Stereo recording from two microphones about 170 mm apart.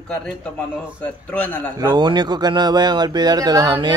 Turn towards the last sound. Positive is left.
turn(degrees=-25)  # may be behind; listen again after turning